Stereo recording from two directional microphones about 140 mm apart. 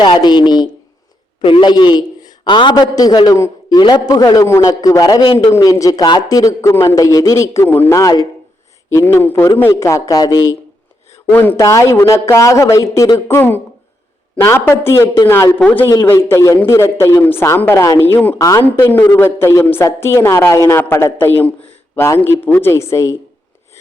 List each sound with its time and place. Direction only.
0.0 s a woman's voice: 30° left (ahead or behind)
5.5 s a woman's voice: 25° left (ahead or behind)
18.6 s a woman's voice: 15° left (ahead or behind)